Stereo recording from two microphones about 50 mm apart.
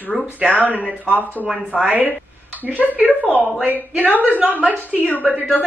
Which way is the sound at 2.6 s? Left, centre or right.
Right.